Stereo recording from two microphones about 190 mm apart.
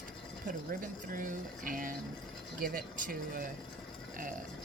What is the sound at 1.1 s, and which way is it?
Speech, 45° right (ahead or behind).